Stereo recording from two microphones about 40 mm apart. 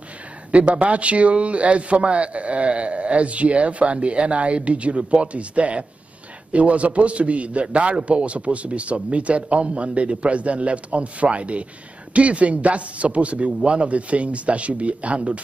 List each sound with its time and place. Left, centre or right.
0.5 s speech: right